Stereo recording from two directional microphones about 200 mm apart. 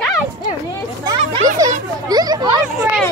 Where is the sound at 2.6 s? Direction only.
5° right (ahead or behind).